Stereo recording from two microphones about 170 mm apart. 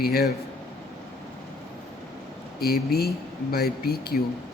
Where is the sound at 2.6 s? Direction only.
65° left (ahead or behind).